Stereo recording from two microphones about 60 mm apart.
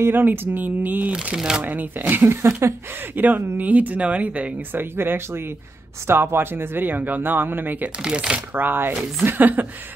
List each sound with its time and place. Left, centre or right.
0.0 s speech: right
1.1 s speech: centre
1.7 s speech: right
4.9 s speech: right
8.0 s speech: centre
8.5 s speech: right